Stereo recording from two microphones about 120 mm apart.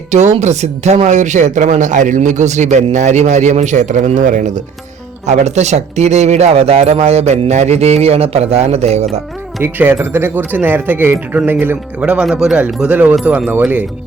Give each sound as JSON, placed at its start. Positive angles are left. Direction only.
{"t": 0.1, "sound": "speech", "side_deg": -70}
{"t": 5.2, "sound": "speech", "side_deg": -70}
{"t": 9.6, "sound": "speech", "side_deg": -15}